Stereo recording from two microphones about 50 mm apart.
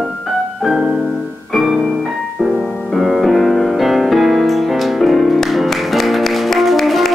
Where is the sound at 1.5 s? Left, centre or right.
Centre.